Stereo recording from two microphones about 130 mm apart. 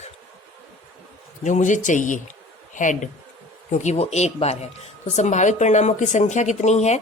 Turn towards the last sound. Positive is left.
turn(degrees=60)  # may be behind; listen again after turning